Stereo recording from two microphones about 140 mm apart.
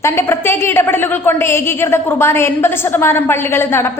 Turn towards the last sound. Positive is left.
turn(degrees=15)  # may be behind; listen again after turning